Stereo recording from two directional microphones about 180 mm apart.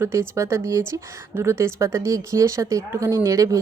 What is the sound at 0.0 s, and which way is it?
A woman's voice, 15° right (ahead or behind).